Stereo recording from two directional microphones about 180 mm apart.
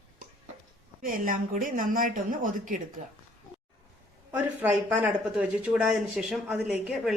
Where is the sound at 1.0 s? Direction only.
50° right (ahead or behind).